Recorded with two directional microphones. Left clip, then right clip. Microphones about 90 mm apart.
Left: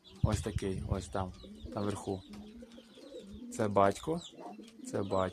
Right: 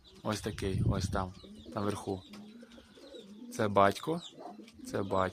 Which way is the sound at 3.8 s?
20° right (ahead or behind).